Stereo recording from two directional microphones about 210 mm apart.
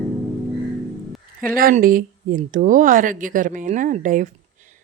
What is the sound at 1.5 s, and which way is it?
Speech, 45° right (ahead or behind).